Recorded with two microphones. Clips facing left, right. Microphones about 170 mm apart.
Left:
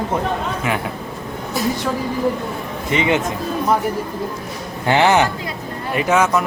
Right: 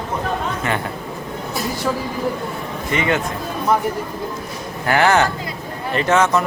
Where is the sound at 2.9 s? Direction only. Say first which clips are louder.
Left 2 dB; 20° left (ahead or behind).